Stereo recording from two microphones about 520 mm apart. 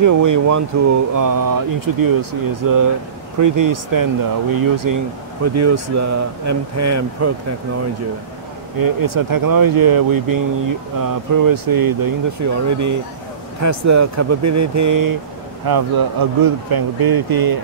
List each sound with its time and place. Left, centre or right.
0.0 s speech: right
8.7 s speech: right